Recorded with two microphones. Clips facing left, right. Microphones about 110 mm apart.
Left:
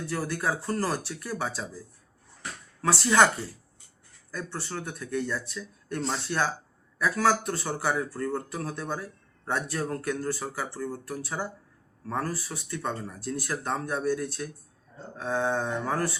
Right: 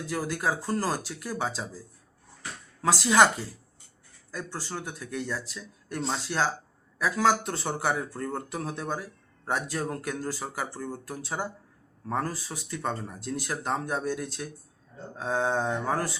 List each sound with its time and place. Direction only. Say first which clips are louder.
0.1 s speech: right 1 dB; 15° right (ahead or behind)
2.8 s speech: right 1 dB; 20° right (ahead or behind)
4.3 s speech: even; 15° right (ahead or behind)
7.0 s speech: even; 20° right (ahead or behind)